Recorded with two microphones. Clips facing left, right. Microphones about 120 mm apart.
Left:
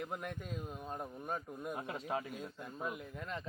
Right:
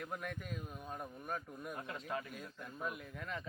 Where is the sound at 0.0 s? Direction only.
20° left (ahead or behind).